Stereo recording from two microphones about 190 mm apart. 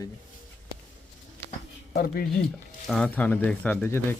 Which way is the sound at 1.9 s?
50° left (ahead or behind).